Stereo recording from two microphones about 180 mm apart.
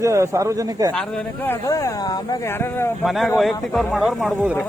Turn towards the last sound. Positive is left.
turn(degrees=0)  # may be behind; listen again after turning